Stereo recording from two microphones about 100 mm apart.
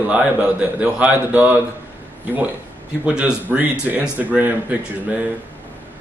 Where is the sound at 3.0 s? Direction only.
10° right (ahead or behind).